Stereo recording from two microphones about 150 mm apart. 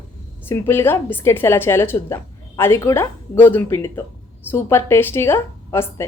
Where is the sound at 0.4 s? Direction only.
15° left (ahead or behind).